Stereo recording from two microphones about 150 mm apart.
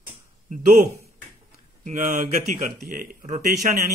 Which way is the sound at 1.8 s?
55° right (ahead or behind).